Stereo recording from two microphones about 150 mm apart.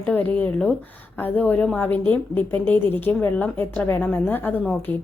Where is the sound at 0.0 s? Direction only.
10° left (ahead or behind).